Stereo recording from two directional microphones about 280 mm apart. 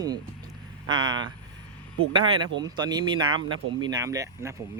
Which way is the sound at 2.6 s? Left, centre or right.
Centre.